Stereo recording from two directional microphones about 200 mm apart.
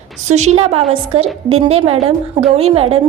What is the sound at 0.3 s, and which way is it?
A woman's voice, 35° right (ahead or behind).